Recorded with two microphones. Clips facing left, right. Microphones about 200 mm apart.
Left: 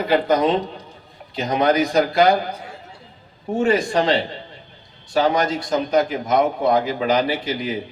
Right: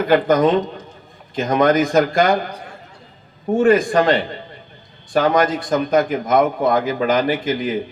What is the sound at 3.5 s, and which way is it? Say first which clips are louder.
A man's voice: right 4 dB; 50° right (ahead or behind).